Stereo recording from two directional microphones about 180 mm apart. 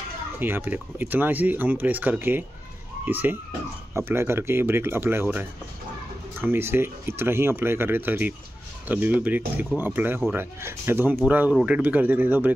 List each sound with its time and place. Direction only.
0.4 s speech: 10° right (ahead or behind)